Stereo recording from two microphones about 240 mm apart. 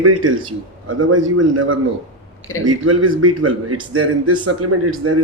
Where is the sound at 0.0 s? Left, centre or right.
Right.